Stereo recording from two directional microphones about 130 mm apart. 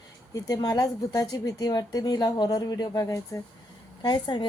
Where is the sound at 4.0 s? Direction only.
35° left (ahead or behind).